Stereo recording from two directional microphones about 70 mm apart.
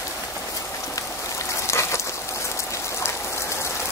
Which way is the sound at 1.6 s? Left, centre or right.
Left.